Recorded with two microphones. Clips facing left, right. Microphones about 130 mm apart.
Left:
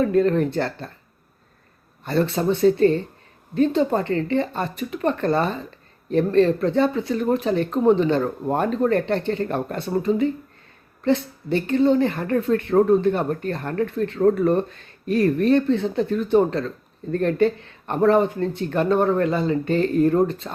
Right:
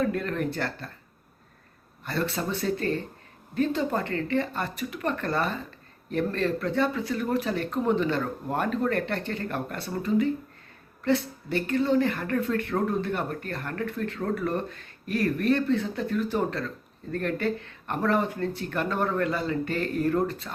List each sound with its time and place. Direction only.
0.0 s speech: 30° left (ahead or behind)
2.0 s speech: 25° left (ahead or behind)